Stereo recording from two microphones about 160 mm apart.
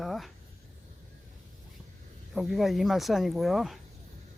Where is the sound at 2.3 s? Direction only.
Centre (ahead or behind).